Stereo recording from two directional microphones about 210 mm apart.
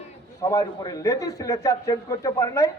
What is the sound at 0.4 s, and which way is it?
A man's voice, 15° left (ahead or behind).